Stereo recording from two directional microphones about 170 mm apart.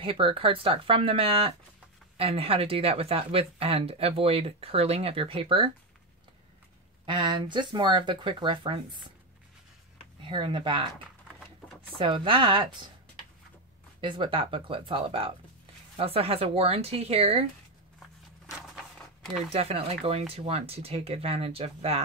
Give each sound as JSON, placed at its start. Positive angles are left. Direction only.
{"t": 0.0, "sound": "speech", "side_deg": -30}
{"t": 7.1, "sound": "speech", "side_deg": -25}
{"t": 10.2, "sound": "speech", "side_deg": -30}
{"t": 11.3, "sound": "a sound", "side_deg": 0}
{"t": 12.0, "sound": "speech", "side_deg": -30}
{"t": 14.0, "sound": "speech", "side_deg": -30}
{"t": 19.5, "sound": "speech", "side_deg": -35}